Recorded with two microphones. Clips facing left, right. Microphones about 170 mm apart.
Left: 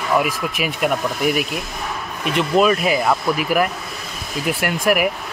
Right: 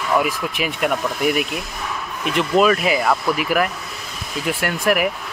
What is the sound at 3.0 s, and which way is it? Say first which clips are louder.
Speech: left 1 dB; 20° left (ahead or behind).